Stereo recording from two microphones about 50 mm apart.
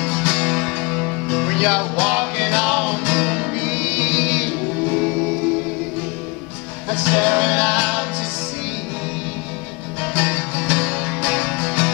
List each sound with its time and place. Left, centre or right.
0.0 s music: centre
0.6 s music: centre
1.6 s music: centre
6.9 s music: right
10.1 s music: right